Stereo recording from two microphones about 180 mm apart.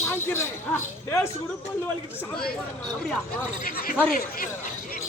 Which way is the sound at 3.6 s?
55° left (ahead or behind).